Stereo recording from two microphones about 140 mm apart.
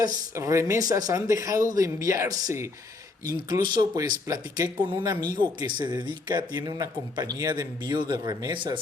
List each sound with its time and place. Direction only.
0.0 s speech: 25° right (ahead or behind)